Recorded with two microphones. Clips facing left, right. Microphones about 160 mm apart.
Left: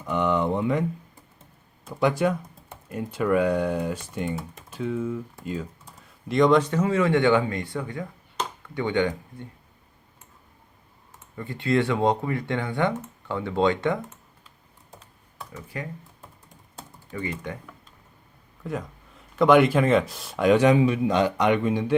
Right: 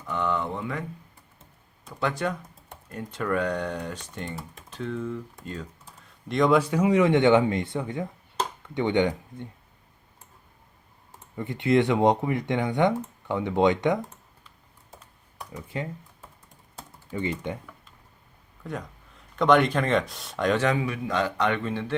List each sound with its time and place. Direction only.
0.0 s speech: 20° left (ahead or behind)
1.9 s speech: 15° left (ahead or behind); by 9.5 s 20° right (ahead or behind)
11.3 s speech: 20° right (ahead or behind)
15.4 s speech: 20° right (ahead or behind)
17.1 s speech: 25° right (ahead or behind)
18.6 s speech: centre (ahead or behind)